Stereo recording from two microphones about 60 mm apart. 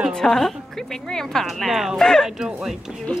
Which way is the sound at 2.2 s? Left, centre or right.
Centre.